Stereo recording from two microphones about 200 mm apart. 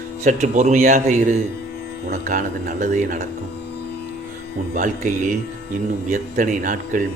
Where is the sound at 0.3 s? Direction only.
40° right (ahead or behind).